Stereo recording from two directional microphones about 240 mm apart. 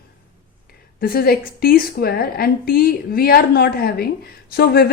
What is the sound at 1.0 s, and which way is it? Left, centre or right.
A woman's voice, left.